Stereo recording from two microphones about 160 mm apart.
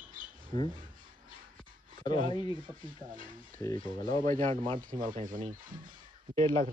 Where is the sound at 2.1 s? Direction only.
30° left (ahead or behind).